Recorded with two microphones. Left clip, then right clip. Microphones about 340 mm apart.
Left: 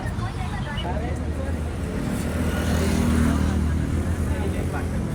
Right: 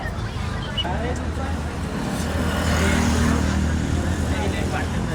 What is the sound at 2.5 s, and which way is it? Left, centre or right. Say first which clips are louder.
Vehicle: right 4 dB; right.